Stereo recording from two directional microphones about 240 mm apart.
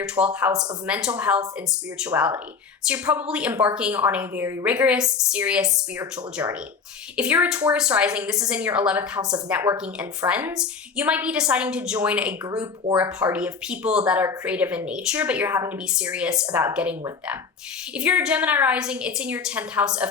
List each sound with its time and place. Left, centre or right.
0.2 s speech: right
0.9 s speech: centre